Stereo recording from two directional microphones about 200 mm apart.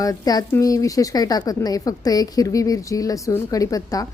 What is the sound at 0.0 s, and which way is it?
A woman's voice, 20° left (ahead or behind).